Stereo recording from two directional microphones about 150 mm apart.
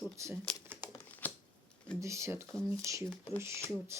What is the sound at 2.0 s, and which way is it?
Speech, 20° right (ahead or behind).